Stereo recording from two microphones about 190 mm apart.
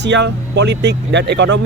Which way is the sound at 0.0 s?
65° right (ahead or behind).